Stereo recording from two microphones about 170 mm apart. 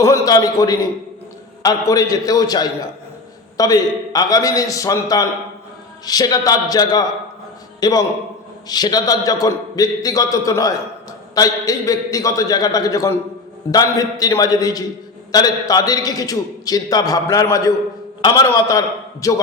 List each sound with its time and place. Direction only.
0.0 s a man's voice: 20° left (ahead or behind)